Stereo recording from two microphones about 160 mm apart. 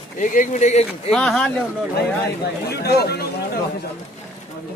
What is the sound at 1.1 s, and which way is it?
Speech, 5° left (ahead or behind).